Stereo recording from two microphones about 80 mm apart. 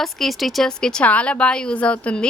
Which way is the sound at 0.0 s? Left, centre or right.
Centre.